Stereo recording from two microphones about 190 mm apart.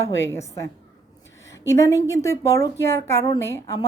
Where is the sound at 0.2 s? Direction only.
15° left (ahead or behind).